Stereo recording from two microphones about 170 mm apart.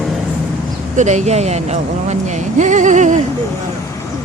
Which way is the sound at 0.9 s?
45° right (ahead or behind).